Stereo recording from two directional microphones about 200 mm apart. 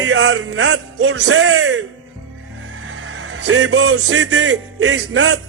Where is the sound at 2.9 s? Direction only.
70° right (ahead or behind).